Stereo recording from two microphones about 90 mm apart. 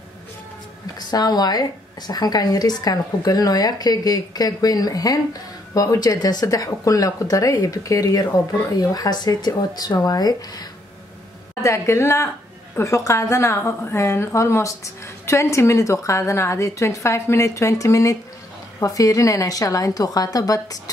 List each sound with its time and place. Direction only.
0.9 s a woman's voice: 45° left (ahead or behind)
11.6 s a woman's voice: 35° left (ahead or behind)